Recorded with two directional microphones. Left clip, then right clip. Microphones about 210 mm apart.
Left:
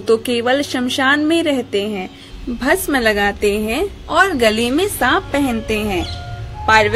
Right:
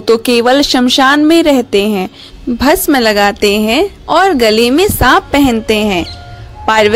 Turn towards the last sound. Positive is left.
turn(degrees=-45)  # may be behind; listen again after turning